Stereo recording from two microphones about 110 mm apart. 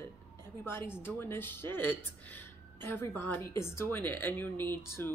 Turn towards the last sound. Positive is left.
turn(degrees=20)  # may be behind; listen again after turning